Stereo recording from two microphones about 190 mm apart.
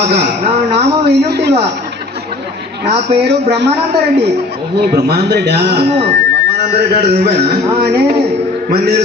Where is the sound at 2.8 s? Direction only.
60° right (ahead or behind).